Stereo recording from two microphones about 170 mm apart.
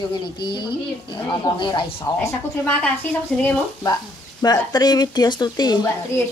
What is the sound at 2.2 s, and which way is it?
A woman's voice, 10° left (ahead or behind).